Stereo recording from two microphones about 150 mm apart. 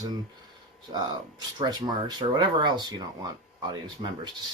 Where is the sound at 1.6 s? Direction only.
30° right (ahead or behind).